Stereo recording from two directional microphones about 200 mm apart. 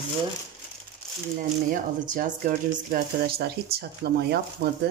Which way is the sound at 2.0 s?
40° right (ahead or behind).